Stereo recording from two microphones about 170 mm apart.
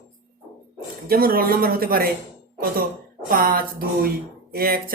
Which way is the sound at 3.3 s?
60° right (ahead or behind).